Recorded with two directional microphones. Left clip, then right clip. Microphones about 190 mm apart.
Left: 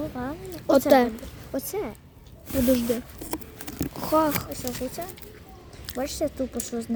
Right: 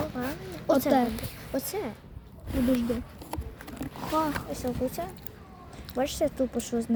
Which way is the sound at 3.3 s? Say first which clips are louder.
Left 3 dB; 60° left (ahead or behind).